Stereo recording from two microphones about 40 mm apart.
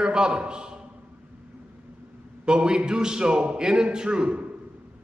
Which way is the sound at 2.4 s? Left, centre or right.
Right.